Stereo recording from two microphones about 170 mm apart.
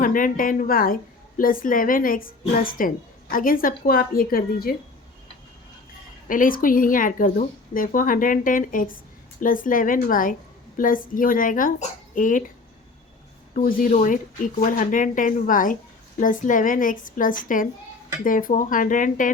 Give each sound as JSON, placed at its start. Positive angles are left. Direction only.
{"t": 0.0, "sound": "a woman's voice", "side_deg": 55}
{"t": 6.2, "sound": "a woman's voice", "side_deg": 55}
{"t": 13.7, "sound": "a woman's voice", "side_deg": 55}